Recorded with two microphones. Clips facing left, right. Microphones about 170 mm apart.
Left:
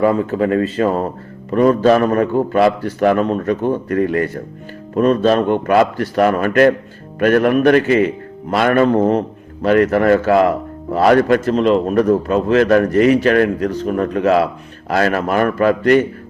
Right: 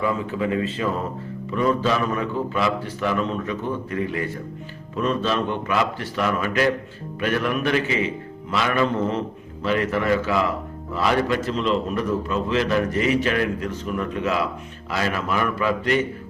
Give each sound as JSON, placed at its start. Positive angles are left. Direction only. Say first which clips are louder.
{"t": 0.0, "sound": "a man's voice", "louder": "left 9 dB", "side_deg": 45}
{"t": 3.2, "sound": "a man's voice", "louder": "left 8 dB", "side_deg": 45}
{"t": 13.7, "sound": "a man's voice", "louder": "left 8 dB", "side_deg": 45}
{"t": 14.1, "sound": "a man's voice", "louder": "left 10 dB", "side_deg": 65}